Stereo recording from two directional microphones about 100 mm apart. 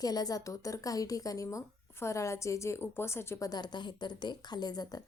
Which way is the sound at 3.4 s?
45° left (ahead or behind).